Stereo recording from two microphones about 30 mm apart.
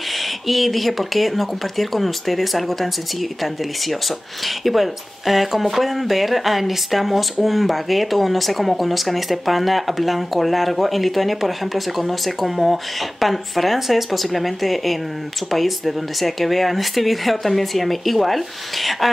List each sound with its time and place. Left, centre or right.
0.1 s speech: centre
4.5 s speech: centre